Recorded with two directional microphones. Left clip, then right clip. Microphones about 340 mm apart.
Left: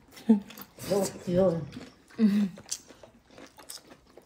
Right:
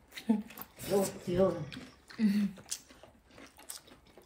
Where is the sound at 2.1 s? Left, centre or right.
Centre.